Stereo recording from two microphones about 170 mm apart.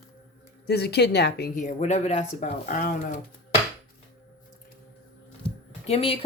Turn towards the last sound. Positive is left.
turn(degrees=35)  # may be behind; listen again after turning